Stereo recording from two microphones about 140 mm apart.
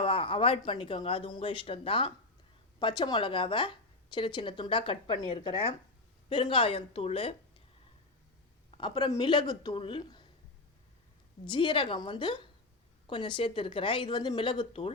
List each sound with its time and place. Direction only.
0.0 s a woman's voice: 40° left (ahead or behind)
8.8 s a woman's voice: 30° left (ahead or behind)
11.4 s a woman's voice: 35° left (ahead or behind)